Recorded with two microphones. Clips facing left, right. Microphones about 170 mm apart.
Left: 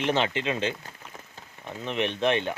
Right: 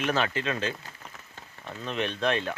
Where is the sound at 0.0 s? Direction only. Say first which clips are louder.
Left 2 dB; 25° left (ahead or behind).